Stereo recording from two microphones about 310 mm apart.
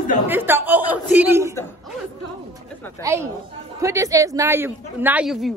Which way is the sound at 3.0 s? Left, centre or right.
Centre.